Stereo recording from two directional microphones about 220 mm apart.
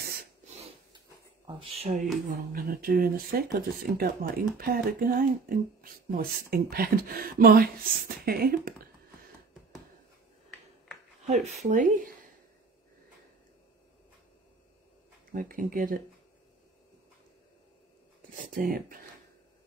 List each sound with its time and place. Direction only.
0.0 s a sound: 40° right (ahead or behind)
1.5 s speech: 25° right (ahead or behind)
2.5 s speech: 40° right (ahead or behind)
11.4 s speech: 35° right (ahead or behind)
15.3 s speech: 40° right (ahead or behind)
18.3 s speech: 40° right (ahead or behind)